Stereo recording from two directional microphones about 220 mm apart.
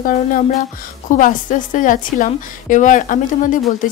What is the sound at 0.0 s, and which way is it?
A woman's voice, 40° left (ahead or behind).